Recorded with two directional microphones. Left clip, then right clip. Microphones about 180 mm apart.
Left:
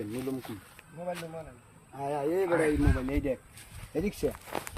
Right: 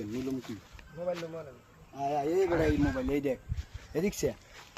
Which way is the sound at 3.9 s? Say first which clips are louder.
Right 1 dB; 30° right (ahead or behind).